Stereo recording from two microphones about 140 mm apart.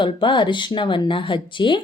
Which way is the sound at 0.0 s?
35° left (ahead or behind).